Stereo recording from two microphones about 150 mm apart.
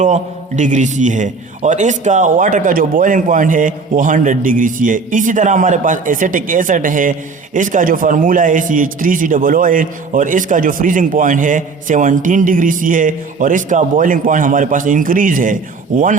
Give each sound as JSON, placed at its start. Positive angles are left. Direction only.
{"t": 0.0, "sound": "a man's voice", "side_deg": -55}